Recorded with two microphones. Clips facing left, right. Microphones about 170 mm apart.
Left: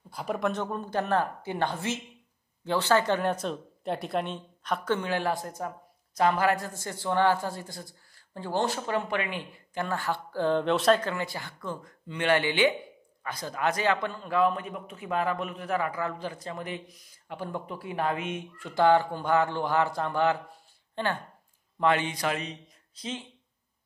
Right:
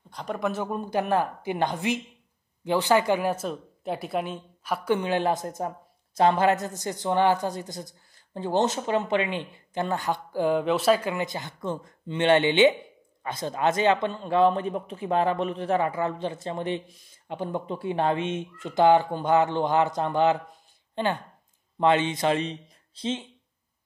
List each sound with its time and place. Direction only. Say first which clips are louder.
0.1 s a man's voice: even; 5° left (ahead or behind); by 23.2 s 25° right (ahead or behind)